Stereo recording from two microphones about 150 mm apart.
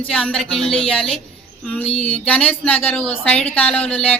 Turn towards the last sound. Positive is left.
turn(degrees=10)  # may be behind; listen again after turning